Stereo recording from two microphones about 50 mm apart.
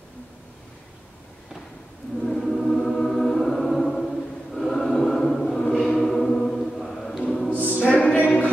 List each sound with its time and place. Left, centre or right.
2.1 s music: centre
4.6 s choir: centre
7.2 s choir: left
7.9 s music: left